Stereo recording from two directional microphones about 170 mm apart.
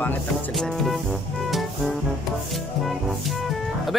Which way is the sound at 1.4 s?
Centre (ahead or behind).